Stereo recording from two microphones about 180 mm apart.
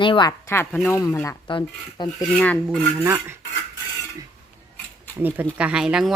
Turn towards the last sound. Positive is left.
turn(degrees=-5)  # may be behind; listen again after turning